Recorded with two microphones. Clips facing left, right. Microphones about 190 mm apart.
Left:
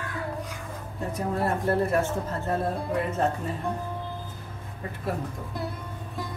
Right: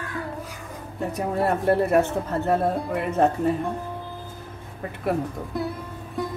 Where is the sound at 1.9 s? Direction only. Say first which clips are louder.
Right 5 dB; 65° right (ahead or behind).